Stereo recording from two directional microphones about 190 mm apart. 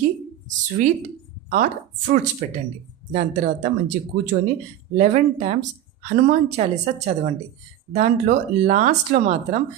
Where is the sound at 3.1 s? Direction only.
45° right (ahead or behind).